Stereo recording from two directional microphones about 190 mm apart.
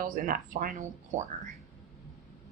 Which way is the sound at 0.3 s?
45° right (ahead or behind).